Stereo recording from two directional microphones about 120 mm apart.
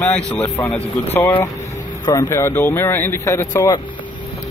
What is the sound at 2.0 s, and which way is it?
Speech, 35° left (ahead or behind).